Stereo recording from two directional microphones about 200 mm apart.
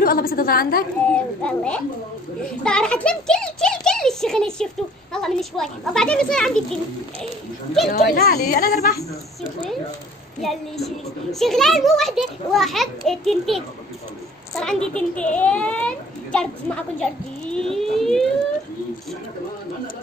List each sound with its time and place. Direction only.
0.0 s a sound: 45° left (ahead or behind)
1.1 s a child's voice: 5° left (ahead or behind)
7.9 s speech: 45° left (ahead or behind)
11.3 s a child's voice: centre (ahead or behind)